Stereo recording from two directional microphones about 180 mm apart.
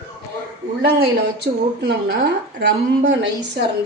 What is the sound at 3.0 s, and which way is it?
Speech, 75° right (ahead or behind).